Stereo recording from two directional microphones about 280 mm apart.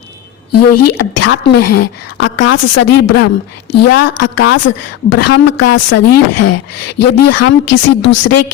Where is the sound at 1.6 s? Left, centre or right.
Left.